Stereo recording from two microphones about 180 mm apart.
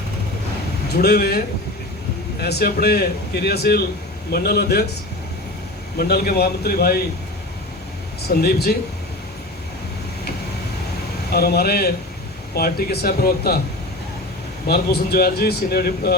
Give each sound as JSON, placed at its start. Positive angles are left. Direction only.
{"t": 0.9, "sound": "speech", "side_deg": 60}
{"t": 6.0, "sound": "speech", "side_deg": 60}
{"t": 8.4, "sound": "speech", "side_deg": 60}
{"t": 11.3, "sound": "speech", "side_deg": 60}
{"t": 14.7, "sound": "speech", "side_deg": 60}